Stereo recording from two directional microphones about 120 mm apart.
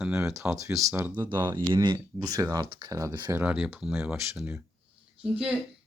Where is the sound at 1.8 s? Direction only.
35° right (ahead or behind).